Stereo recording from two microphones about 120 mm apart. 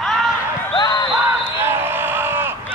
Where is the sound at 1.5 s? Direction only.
20° right (ahead or behind).